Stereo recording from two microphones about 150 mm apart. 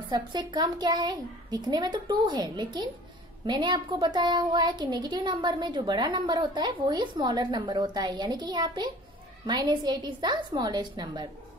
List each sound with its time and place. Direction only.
0.1 s speech: 30° right (ahead or behind)